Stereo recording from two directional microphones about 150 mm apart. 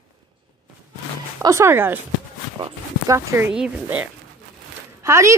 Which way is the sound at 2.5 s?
20° right (ahead or behind).